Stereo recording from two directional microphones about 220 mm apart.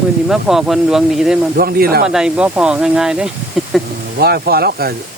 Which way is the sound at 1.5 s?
45° right (ahead or behind).